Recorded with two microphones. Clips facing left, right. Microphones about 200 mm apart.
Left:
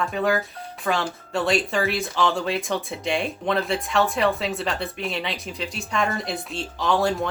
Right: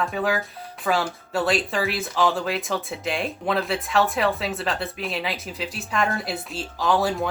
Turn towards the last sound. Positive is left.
turn(degrees=-5)  # may be behind; listen again after turning